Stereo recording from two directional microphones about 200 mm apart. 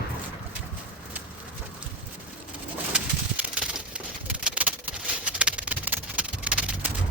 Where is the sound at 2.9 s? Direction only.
5° right (ahead or behind).